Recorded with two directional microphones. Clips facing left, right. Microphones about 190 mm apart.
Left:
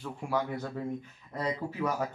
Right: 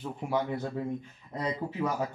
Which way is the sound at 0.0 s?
20° right (ahead or behind).